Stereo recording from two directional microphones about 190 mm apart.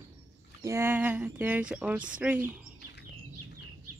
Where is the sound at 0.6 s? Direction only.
15° right (ahead or behind).